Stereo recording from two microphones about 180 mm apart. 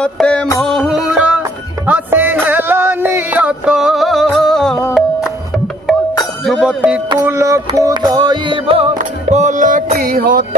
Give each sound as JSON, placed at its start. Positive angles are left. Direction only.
{"t": 0.0, "sound": "music", "side_deg": 5}
{"t": 6.4, "sound": "music", "side_deg": 0}
{"t": 7.1, "sound": "music", "side_deg": -15}
{"t": 8.9, "sound": "music", "side_deg": -45}